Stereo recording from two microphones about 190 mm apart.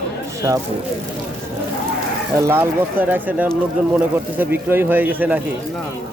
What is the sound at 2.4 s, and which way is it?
Speech, 10° right (ahead or behind).